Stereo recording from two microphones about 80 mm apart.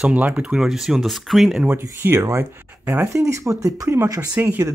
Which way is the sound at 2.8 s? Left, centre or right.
Centre.